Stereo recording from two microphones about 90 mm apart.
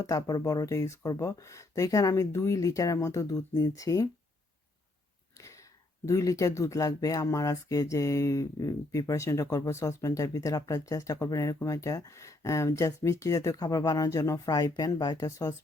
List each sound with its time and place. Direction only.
0.0 s speech: 40° left (ahead or behind)
6.1 s speech: 35° left (ahead or behind)